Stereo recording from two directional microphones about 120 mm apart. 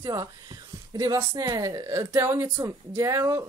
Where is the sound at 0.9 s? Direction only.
30° right (ahead or behind).